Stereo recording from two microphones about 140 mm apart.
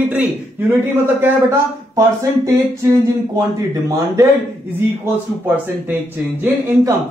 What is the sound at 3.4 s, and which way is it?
Speech, 20° right (ahead or behind).